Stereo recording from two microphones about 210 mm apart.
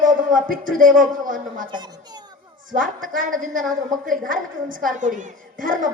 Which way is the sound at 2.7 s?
40° right (ahead or behind).